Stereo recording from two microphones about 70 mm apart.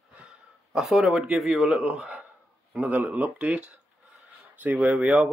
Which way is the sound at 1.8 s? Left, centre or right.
Centre.